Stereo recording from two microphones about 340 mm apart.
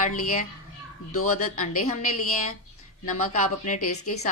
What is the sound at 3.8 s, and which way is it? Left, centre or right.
Speech, left.